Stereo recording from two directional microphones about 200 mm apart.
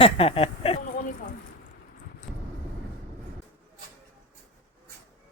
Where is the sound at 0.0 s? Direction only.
30° left (ahead or behind).